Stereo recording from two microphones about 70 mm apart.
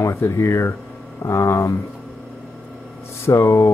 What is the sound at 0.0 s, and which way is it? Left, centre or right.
Speech, left.